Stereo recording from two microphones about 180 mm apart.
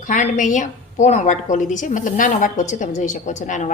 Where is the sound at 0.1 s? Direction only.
45° left (ahead or behind).